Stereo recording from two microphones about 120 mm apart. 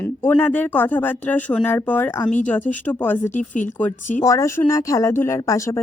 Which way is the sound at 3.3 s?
90° left.